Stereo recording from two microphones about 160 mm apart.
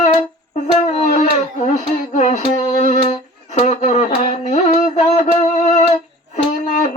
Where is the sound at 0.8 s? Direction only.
45° left (ahead or behind).